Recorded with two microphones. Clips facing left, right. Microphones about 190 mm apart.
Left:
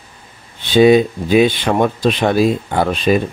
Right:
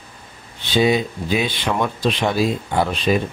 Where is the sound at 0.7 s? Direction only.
60° left (ahead or behind).